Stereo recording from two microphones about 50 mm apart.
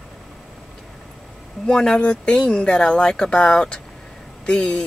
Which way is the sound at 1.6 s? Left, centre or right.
Centre.